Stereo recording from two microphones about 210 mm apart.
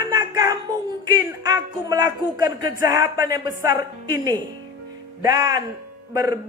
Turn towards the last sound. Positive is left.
turn(degrees=-15)  # may be behind; listen again after turning